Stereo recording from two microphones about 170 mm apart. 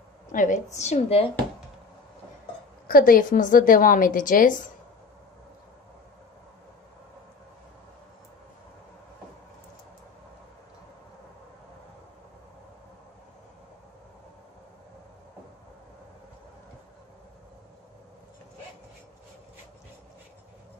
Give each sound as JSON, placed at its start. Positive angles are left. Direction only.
{"t": 0.3, "sound": "a woman's voice", "side_deg": 50}
{"t": 2.9, "sound": "a woman's voice", "side_deg": 55}